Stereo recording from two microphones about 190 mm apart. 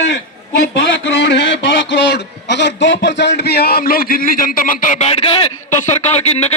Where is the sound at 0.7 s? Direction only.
65° left (ahead or behind).